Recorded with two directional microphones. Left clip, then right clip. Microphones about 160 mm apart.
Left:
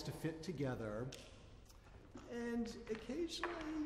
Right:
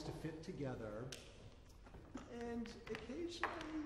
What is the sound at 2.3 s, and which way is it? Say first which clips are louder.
A man's voice: left 4 dB; 20° left (ahead or behind).